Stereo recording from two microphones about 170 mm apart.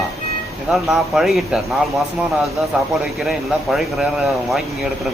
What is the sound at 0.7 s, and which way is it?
Speech, centre (ahead or behind).